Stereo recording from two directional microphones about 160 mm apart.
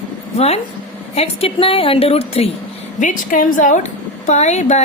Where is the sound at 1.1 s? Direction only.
40° left (ahead or behind).